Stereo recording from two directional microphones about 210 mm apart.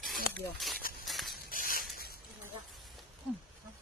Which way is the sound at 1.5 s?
40° left (ahead or behind).